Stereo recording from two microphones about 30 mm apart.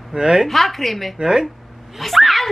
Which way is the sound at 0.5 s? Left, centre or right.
Centre.